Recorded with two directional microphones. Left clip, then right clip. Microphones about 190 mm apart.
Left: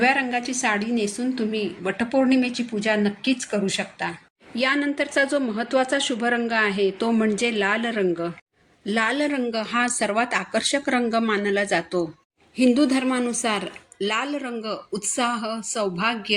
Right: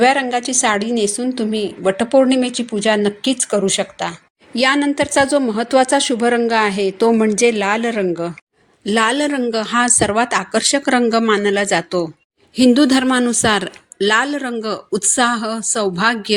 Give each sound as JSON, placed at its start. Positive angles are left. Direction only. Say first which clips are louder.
{"t": 0.0, "sound": "a woman's voice", "louder": "right 7 dB", "side_deg": -40}